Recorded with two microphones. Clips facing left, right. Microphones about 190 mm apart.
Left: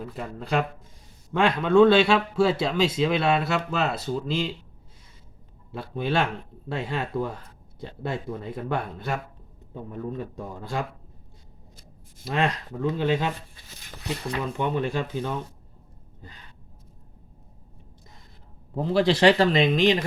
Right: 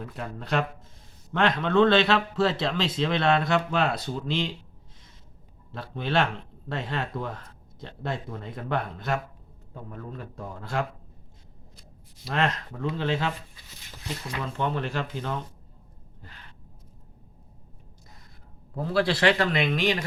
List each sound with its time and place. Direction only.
0.0 s speech: 5° left (ahead or behind)
5.7 s speech: 10° left (ahead or behind)
12.3 s speech: 10° left (ahead or behind)
14.5 s speech: 15° left (ahead or behind)
18.7 s a man's voice: 20° left (ahead or behind)